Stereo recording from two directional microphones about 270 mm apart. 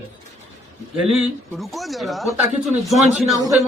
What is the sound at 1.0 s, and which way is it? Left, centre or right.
A man's voice, centre.